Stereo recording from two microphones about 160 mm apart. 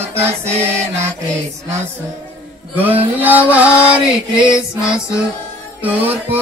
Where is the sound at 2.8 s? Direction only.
10° right (ahead or behind).